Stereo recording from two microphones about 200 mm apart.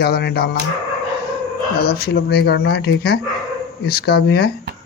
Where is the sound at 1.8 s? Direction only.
50° left (ahead or behind).